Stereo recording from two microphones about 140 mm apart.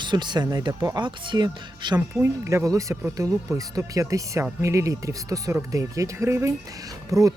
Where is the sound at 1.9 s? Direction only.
20° right (ahead or behind).